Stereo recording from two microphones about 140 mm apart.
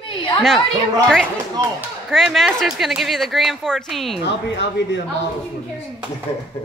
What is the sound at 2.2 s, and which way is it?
A woman's voice, centre (ahead or behind).